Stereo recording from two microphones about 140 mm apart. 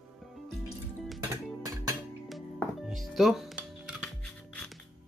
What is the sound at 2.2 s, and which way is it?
Music, centre (ahead or behind).